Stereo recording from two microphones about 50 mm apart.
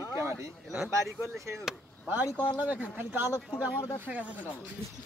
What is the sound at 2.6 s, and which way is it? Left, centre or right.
Speech, right.